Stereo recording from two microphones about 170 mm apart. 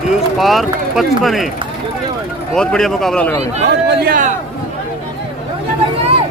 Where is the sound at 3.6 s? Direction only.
55° right (ahead or behind).